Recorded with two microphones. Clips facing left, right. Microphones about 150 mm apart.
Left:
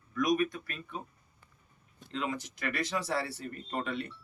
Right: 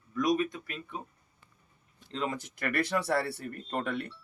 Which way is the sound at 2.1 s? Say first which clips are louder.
Right 1 dB; 40° right (ahead or behind).